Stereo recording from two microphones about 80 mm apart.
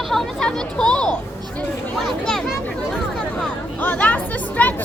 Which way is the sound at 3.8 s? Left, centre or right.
Left.